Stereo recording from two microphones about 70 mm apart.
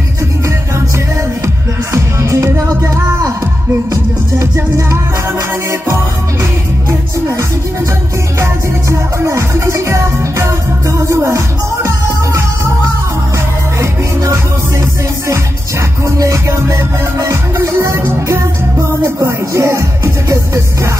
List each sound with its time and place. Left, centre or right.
1.4 s music: right
6.9 s music: right
9.2 s music: right
13.7 s music: right
16.2 s music: right